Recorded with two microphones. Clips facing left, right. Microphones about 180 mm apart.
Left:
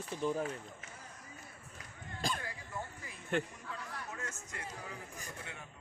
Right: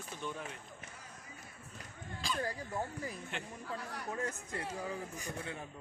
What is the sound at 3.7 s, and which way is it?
Speech, 35° right (ahead or behind).